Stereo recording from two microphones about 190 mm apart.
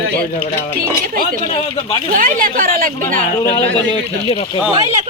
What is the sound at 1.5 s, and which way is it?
Speech, 35° left (ahead or behind).